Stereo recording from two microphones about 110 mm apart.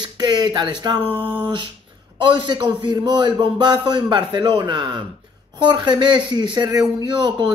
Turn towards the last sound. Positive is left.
turn(degrees=-45)  # may be behind; listen again after turning